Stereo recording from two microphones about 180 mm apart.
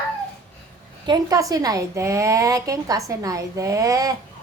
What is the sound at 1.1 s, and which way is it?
Speech, 20° right (ahead or behind).